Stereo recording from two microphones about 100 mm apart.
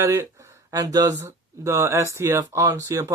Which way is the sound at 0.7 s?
40° right (ahead or behind).